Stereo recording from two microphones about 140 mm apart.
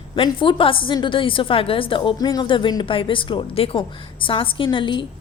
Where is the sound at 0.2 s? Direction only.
40° left (ahead or behind).